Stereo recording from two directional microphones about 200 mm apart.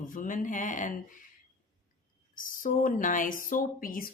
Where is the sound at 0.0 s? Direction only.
40° left (ahead or behind).